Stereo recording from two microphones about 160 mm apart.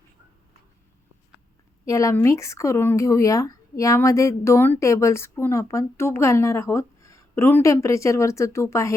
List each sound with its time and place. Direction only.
1.8 s speech: 20° left (ahead or behind)